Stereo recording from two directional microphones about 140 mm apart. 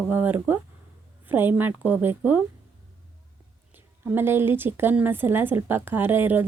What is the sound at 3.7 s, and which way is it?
Speech, 15° right (ahead or behind).